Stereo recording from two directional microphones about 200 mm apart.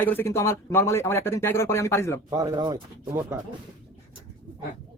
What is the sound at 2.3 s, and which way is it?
Speech, 20° right (ahead or behind).